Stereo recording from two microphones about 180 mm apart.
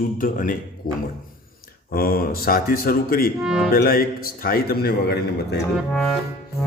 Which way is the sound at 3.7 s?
55° left (ahead or behind).